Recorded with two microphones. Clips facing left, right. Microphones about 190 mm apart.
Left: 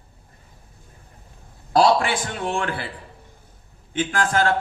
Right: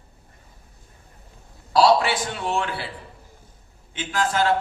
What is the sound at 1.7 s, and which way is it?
A man's voice, 50° left (ahead or behind).